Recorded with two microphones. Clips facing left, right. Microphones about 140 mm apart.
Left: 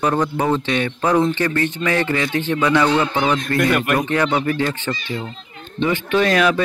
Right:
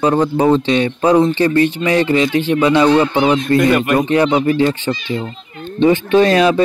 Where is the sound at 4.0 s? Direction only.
20° right (ahead or behind).